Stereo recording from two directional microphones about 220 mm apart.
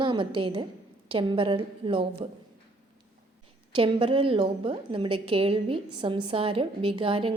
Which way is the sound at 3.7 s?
25° right (ahead or behind).